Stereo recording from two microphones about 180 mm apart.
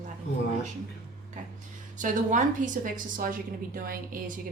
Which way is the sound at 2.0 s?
45° right (ahead or behind).